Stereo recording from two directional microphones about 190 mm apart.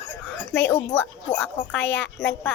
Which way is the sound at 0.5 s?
10° left (ahead or behind).